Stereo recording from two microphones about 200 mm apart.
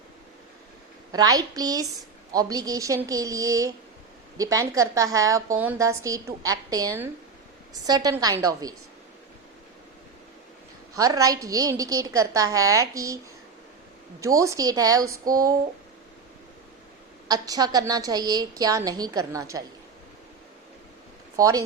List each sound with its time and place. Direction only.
1.1 s a woman's voice: 20° right (ahead or behind)
10.9 s a woman's voice: 15° right (ahead or behind)
14.2 s a woman's voice: 15° right (ahead or behind)
17.2 s a woman's voice: 20° right (ahead or behind)
21.3 s speech: 15° right (ahead or behind)